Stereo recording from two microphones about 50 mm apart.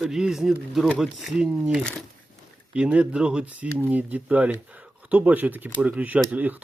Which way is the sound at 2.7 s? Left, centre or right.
Right.